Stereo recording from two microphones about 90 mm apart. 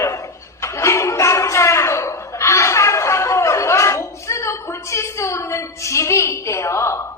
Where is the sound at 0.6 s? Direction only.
30° left (ahead or behind).